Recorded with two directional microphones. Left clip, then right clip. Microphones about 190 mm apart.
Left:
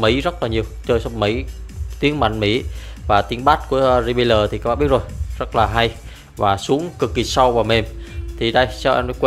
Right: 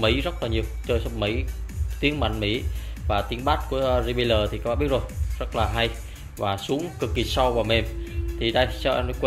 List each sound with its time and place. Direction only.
0.0 s speech: 35° left (ahead or behind)